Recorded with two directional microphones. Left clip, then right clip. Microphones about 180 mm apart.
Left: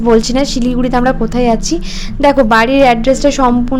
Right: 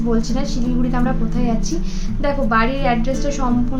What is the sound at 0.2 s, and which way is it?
A woman's voice, 55° left (ahead or behind).